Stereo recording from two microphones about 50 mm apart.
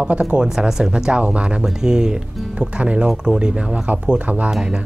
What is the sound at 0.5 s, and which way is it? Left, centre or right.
Speech, centre.